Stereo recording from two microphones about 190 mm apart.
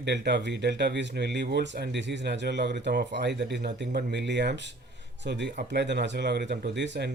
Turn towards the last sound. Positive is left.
turn(degrees=-65)  # may be behind; listen again after turning